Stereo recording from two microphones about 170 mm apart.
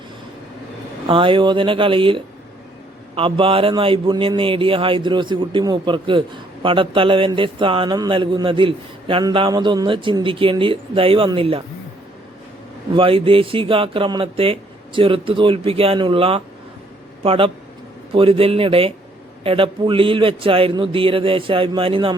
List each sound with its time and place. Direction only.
1.0 s speech: 30° right (ahead or behind)
12.9 s speech: 30° right (ahead or behind)